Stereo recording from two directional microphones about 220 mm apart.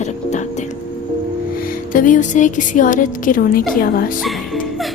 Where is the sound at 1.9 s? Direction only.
35° left (ahead or behind).